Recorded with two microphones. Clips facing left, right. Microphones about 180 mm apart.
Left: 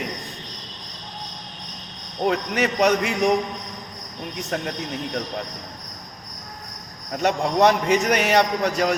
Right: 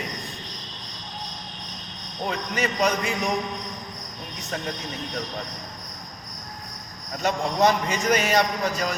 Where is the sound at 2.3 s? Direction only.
70° left (ahead or behind).